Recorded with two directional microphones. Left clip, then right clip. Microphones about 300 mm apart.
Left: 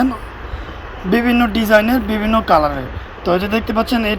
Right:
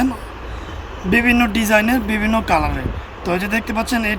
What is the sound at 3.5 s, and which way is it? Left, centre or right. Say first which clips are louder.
Speech: left 3 dB; centre.